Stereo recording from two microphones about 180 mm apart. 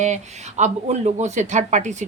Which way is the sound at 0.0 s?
40° right (ahead or behind).